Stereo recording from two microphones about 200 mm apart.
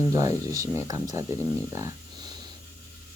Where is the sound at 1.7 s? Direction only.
15° right (ahead or behind).